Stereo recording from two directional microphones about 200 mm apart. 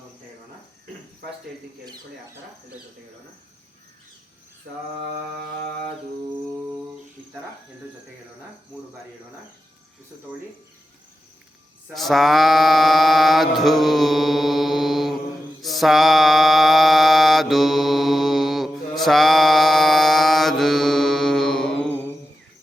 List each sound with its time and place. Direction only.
1.8 s speech: 20° right (ahead or behind)
11.9 s mantra: centre (ahead or behind)